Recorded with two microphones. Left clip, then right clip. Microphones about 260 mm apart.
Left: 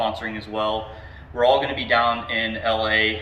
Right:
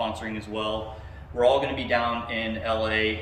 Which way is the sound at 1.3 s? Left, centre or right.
Centre.